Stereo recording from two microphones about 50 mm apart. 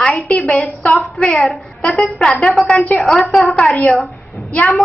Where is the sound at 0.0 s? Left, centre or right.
Left.